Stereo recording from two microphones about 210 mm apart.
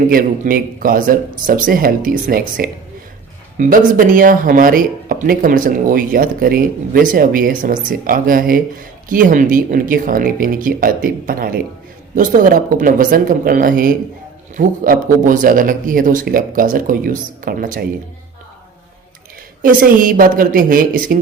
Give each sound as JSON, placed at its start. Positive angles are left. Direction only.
{"t": 0.1, "sound": "speech", "side_deg": -40}
{"t": 19.6, "sound": "speech", "side_deg": -40}